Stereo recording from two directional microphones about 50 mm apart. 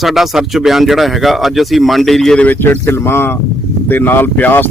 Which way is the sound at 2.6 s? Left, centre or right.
Left.